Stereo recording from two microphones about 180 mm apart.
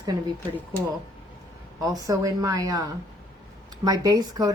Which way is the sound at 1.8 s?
20° right (ahead or behind).